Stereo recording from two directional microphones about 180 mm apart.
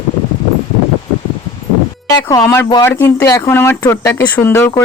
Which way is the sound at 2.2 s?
15° left (ahead or behind).